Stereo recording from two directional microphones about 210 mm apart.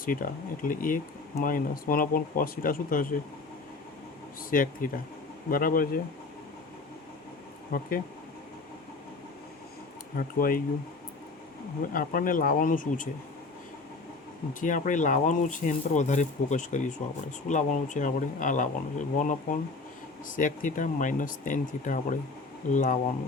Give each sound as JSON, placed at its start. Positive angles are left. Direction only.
{"t": 0.0, "sound": "speech", "side_deg": 40}
{"t": 4.4, "sound": "speech", "side_deg": 40}
{"t": 7.7, "sound": "speech", "side_deg": 45}
{"t": 10.2, "sound": "speech", "side_deg": 45}
{"t": 11.9, "sound": "speech", "side_deg": 40}
{"t": 14.6, "sound": "speech", "side_deg": 40}